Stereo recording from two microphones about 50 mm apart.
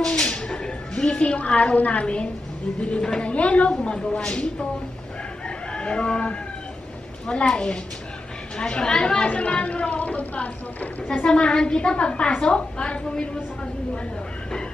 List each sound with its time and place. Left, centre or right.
0.0 s a sound: centre
2.8 s a woman's voice: centre
5.7 s a woman's voice: centre
11.2 s a woman's voice: centre